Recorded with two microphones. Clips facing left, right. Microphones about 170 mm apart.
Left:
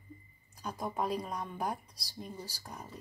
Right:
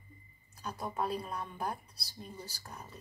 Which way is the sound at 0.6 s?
15° left (ahead or behind).